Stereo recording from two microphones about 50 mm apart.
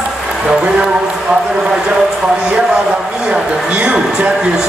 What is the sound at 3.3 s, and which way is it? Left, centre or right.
Speech, centre.